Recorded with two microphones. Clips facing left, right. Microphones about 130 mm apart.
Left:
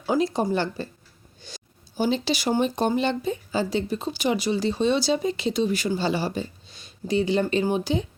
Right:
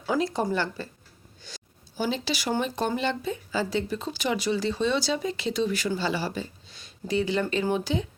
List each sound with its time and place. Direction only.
0.1 s speech: 20° left (ahead or behind)
1.4 s a sound: 20° left (ahead or behind)
2.6 s speech: 20° left (ahead or behind)